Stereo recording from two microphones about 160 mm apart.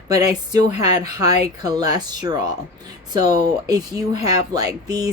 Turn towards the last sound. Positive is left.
turn(degrees=-25)  # may be behind; listen again after turning